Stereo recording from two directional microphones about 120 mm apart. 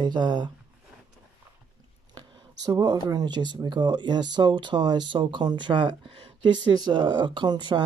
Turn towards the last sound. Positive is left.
turn(degrees=-40)  # may be behind; listen again after turning